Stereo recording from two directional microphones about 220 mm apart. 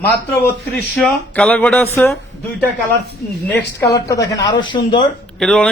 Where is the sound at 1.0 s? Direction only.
5° left (ahead or behind).